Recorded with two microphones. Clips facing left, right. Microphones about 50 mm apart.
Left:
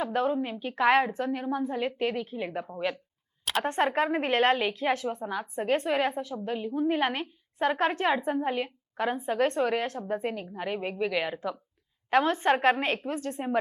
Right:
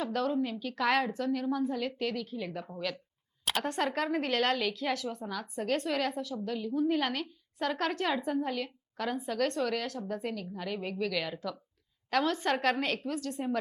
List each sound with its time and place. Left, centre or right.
0.0 s a woman's voice: left